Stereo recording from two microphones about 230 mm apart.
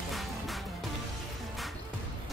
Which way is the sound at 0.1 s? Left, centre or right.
Centre.